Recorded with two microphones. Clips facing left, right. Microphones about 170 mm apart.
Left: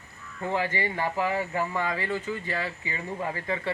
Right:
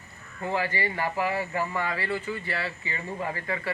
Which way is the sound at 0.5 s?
20° left (ahead or behind).